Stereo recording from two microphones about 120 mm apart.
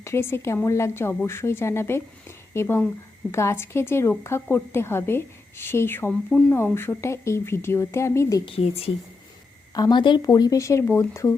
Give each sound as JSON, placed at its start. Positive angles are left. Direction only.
{"t": 0.0, "sound": "a woman's voice", "side_deg": 20}
{"t": 8.4, "sound": "a woman's voice", "side_deg": 55}
{"t": 9.7, "sound": "a woman's voice", "side_deg": 35}